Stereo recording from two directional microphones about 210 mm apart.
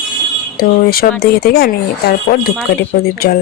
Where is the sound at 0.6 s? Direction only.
45° left (ahead or behind).